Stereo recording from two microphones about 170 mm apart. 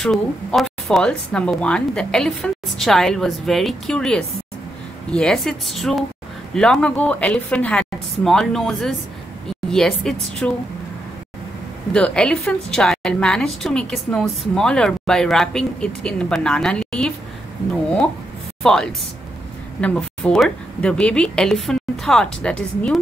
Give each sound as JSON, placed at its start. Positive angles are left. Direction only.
{"t": 0.0, "sound": "a woman's voice", "side_deg": 0}
{"t": 11.9, "sound": "a woman's voice", "side_deg": 5}
{"t": 18.6, "sound": "a woman's voice", "side_deg": 5}